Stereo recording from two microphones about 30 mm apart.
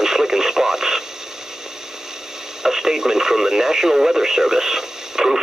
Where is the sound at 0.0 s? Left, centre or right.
Centre.